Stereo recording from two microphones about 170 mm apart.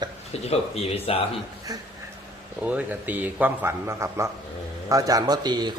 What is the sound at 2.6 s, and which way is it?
A man's voice, 10° right (ahead or behind).